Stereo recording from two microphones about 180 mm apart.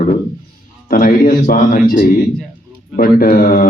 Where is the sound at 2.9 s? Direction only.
50° left (ahead or behind).